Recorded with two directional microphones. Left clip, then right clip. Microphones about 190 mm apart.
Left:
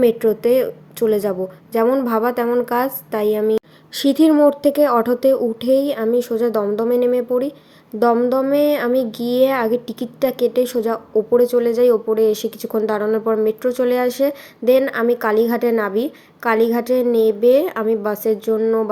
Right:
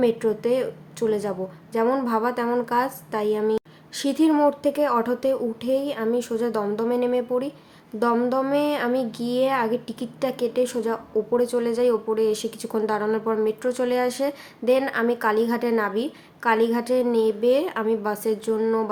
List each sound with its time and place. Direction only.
0.0 s speech: 25° left (ahead or behind)